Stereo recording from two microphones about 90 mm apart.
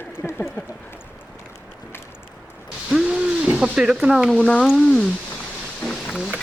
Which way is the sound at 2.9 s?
10° right (ahead or behind).